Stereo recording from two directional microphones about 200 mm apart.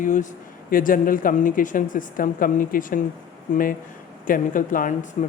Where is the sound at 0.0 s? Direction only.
40° left (ahead or behind).